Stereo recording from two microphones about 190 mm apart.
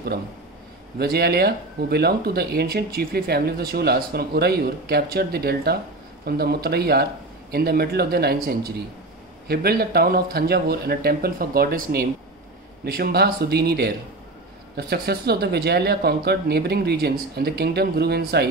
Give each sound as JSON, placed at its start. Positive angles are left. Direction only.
{"t": 0.9, "sound": "speech", "side_deg": -55}